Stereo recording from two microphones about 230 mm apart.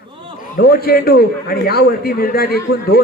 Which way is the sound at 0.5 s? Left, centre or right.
Left.